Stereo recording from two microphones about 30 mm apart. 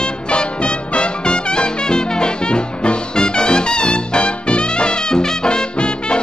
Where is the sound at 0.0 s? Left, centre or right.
Left.